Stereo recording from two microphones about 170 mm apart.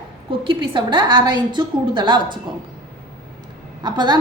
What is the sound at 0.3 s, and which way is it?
A woman's voice, 30° right (ahead or behind).